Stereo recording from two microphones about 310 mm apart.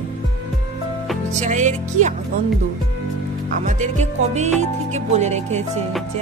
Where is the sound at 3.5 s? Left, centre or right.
Right.